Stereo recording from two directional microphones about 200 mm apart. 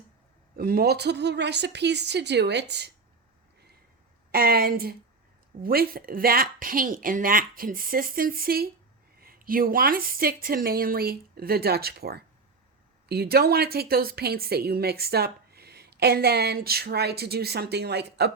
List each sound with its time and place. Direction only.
0.5 s a woman's voice: 50° right (ahead or behind)
4.3 s a woman's voice: 50° right (ahead or behind)